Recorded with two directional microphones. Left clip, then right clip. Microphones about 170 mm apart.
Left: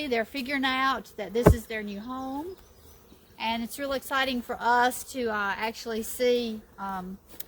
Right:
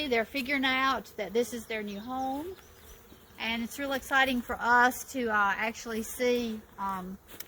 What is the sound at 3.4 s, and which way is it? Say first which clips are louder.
A woman's voice: left 3 dB; 45° left (ahead or behind).